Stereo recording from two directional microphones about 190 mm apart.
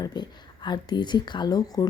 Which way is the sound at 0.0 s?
20° left (ahead or behind).